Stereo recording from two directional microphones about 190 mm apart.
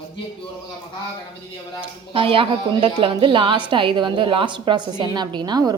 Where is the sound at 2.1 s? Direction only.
30° right (ahead or behind).